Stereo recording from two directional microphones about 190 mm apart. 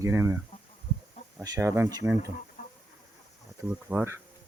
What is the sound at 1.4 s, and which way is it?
Speech, 20° right (ahead or behind).